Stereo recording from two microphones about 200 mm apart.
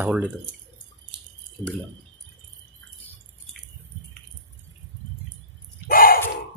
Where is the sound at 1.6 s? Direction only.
5° left (ahead or behind).